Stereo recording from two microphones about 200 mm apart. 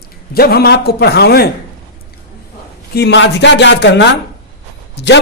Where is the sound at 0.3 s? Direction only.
50° left (ahead or behind).